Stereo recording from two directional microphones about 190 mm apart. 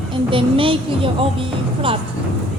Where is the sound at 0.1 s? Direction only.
25° right (ahead or behind).